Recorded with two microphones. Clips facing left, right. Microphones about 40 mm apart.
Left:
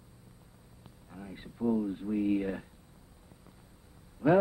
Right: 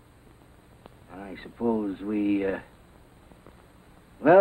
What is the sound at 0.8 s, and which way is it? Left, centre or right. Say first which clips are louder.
Speech: right 6 dB; right.